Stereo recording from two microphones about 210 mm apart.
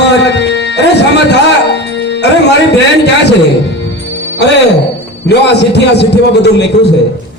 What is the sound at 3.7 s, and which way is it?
Music, 55° left (ahead or behind).